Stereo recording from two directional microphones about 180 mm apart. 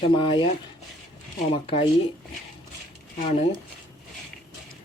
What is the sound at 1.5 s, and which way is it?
Speech, 30° left (ahead or behind).